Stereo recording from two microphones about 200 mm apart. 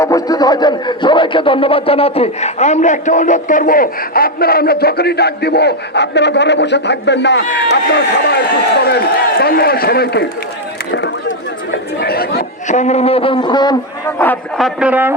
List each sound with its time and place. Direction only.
0.0 s a man's voice: 15° left (ahead or behind)
14.2 s a man's voice: 10° left (ahead or behind)
14.8 s speech: 10° right (ahead or behind)